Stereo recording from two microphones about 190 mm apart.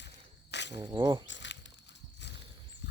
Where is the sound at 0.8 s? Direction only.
20° right (ahead or behind).